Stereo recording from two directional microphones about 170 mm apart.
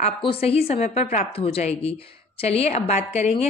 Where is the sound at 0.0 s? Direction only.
35° left (ahead or behind).